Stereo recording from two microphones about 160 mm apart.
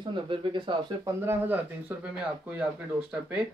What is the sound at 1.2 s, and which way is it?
Speech, 10° right (ahead or behind).